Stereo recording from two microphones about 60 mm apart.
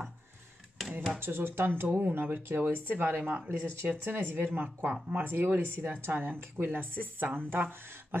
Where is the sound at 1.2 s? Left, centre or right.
Right.